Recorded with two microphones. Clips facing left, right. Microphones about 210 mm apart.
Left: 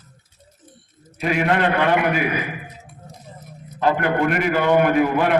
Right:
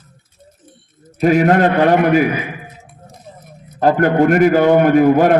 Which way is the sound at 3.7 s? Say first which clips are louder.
Right 7 dB; 45° right (ahead or behind).